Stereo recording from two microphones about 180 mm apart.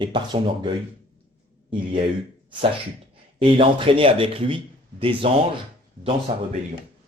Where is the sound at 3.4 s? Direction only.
30° right (ahead or behind).